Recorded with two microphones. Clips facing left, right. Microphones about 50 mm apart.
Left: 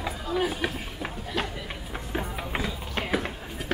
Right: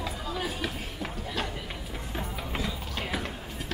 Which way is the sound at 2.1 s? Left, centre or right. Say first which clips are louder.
Left 4 dB; centre.